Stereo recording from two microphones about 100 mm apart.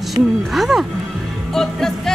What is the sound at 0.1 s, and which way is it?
Speech, centre (ahead or behind).